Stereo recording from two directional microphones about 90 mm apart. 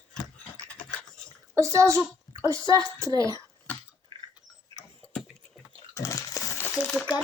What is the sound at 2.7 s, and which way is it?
Speech, 40° right (ahead or behind).